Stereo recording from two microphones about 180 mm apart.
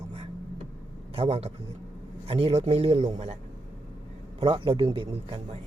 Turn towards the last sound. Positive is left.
turn(degrees=-30)  # may be behind; listen again after turning